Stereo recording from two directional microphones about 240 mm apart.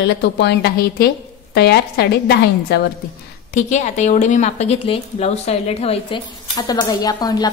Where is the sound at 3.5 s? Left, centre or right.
Left.